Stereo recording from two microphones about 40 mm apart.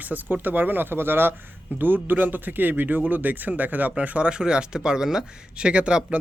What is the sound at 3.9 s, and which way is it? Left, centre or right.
Speech, right.